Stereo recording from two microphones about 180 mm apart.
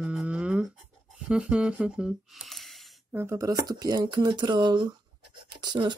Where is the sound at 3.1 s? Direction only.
15° right (ahead or behind).